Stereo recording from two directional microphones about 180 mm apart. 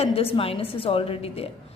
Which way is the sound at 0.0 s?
30° left (ahead or behind).